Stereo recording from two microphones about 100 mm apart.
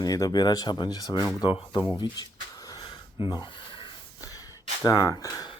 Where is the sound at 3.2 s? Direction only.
60° left (ahead or behind).